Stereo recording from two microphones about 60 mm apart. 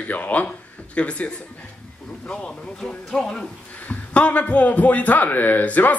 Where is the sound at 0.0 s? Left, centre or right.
Left.